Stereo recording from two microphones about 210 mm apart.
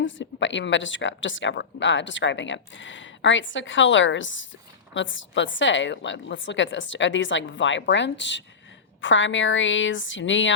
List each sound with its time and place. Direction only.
0.0 s speech: 60° left (ahead or behind)